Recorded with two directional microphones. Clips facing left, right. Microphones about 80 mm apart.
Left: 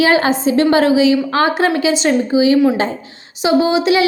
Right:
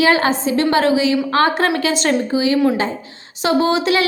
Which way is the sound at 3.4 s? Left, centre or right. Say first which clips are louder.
Left 2 dB; centre.